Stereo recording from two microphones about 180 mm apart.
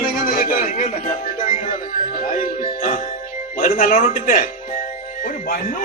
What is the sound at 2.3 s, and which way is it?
A man's voice, 45° left (ahead or behind).